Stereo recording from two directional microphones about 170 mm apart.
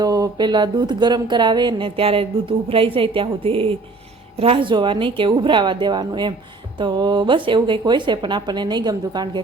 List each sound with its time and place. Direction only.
0.0 s speech: 25° right (ahead or behind)